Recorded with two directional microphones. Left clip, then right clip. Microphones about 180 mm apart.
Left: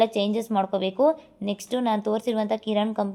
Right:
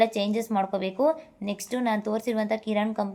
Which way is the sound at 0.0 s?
30° left (ahead or behind).